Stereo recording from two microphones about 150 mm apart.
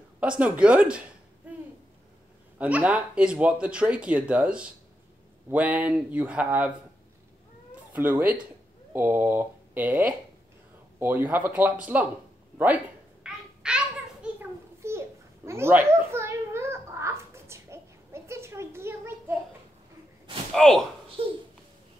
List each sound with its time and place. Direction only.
0.2 s speech: 10° right (ahead or behind)
1.5 s a sound: 10° right (ahead or behind)
2.6 s speech: 10° right (ahead or behind)
7.9 s speech: 10° right (ahead or behind)
13.2 s babbling: 5° right (ahead or behind)
14.4 s a sound: 15° right (ahead or behind)
20.5 s speech: centre (ahead or behind)
21.2 s a child's voice: 40° right (ahead or behind)